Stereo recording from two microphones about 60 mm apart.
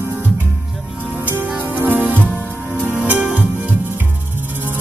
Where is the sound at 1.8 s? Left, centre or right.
Right.